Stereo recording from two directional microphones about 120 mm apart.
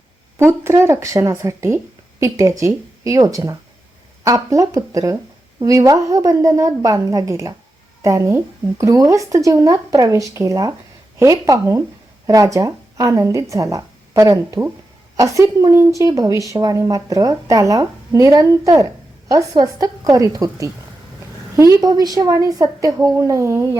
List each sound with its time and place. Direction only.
0.3 s a woman's voice: 20° right (ahead or behind)